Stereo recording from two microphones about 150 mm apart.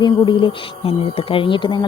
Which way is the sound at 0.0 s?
30° left (ahead or behind).